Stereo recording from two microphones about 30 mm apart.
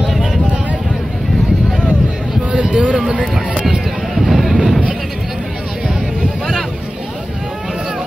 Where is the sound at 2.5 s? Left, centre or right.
Right.